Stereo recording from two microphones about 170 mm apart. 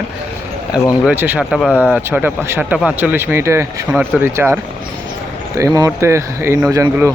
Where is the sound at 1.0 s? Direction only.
10° right (ahead or behind); by 1.9 s 5° left (ahead or behind).